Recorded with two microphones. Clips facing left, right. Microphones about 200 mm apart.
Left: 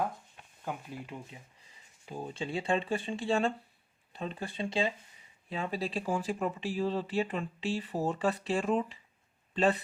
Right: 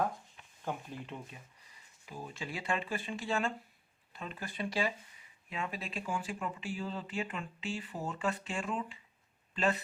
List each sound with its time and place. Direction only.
0.6 s speech: 5° left (ahead or behind)
2.0 s speech: 30° left (ahead or behind)